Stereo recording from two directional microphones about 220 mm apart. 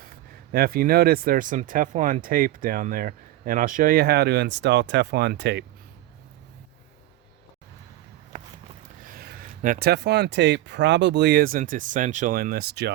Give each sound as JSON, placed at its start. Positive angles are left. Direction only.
{"t": 0.5, "sound": "speech", "side_deg": -45}
{"t": 9.6, "sound": "speech", "side_deg": -40}